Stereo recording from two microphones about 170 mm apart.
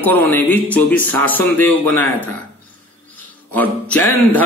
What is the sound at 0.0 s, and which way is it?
A man's voice, 10° left (ahead or behind).